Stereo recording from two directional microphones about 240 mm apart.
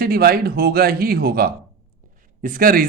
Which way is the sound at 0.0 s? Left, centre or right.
Right.